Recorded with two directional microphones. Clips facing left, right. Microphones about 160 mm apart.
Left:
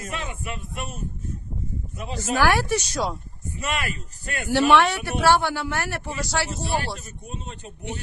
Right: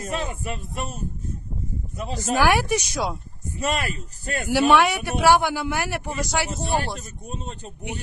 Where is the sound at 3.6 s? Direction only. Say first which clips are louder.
Right 3 dB; 40° right (ahead or behind).